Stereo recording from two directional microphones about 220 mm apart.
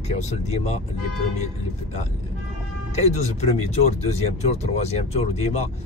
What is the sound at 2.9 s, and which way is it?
Speech, 30° left (ahead or behind).